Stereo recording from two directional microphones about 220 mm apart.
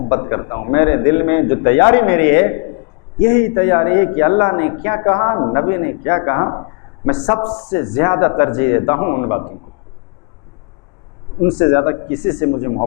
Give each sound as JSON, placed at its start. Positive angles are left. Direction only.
{"t": 0.1, "sound": "a man's voice", "side_deg": 20}
{"t": 11.4, "sound": "speech", "side_deg": 20}
{"t": 12.5, "sound": "speech", "side_deg": 25}